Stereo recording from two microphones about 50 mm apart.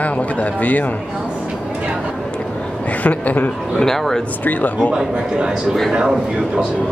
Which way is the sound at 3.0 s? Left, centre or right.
Left.